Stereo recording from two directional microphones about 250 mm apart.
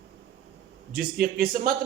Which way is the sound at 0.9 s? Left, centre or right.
Right.